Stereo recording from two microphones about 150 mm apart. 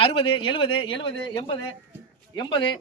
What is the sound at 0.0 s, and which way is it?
Speech, 35° left (ahead or behind).